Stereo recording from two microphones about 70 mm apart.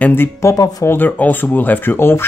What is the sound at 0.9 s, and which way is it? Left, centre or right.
Speech, left.